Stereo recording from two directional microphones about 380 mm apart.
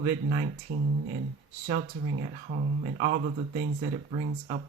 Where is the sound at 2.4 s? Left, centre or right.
Right.